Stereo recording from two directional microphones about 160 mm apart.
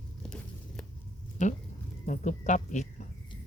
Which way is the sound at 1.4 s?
50° left (ahead or behind).